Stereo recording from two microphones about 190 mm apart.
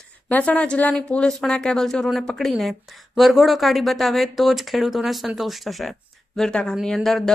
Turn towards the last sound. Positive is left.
turn(degrees=0)  # may be behind; listen again after turning